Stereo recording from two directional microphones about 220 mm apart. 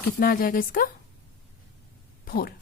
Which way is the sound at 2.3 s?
40° left (ahead or behind).